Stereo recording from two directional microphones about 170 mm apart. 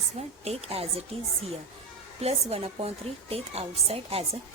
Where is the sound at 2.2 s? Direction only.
40° right (ahead or behind).